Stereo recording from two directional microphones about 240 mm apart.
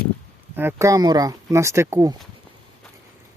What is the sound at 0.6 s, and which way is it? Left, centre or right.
Speech, centre.